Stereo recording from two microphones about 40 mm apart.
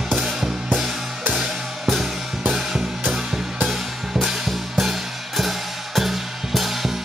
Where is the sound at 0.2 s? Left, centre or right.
Centre.